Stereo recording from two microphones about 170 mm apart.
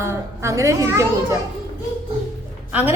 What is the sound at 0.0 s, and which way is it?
A woman's voice, 15° right (ahead or behind).